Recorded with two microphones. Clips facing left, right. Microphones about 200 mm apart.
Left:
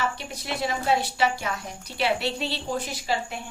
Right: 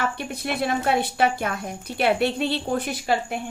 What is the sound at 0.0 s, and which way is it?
A woman's voice, 55° right (ahead or behind).